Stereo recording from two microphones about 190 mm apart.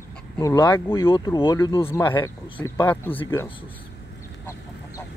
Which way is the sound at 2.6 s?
10° left (ahead or behind).